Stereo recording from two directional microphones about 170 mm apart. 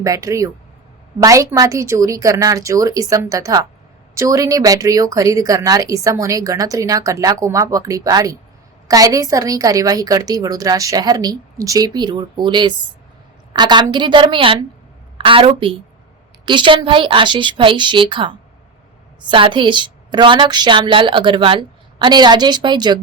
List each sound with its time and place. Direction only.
0.0 s a woman's voice: 20° right (ahead or behind)